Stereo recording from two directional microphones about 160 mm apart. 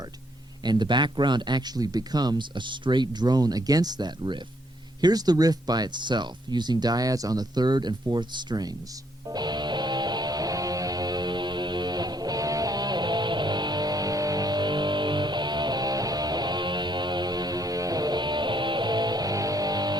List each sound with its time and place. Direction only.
0.6 s speech: 30° right (ahead or behind)
9.3 s music: 25° right (ahead or behind)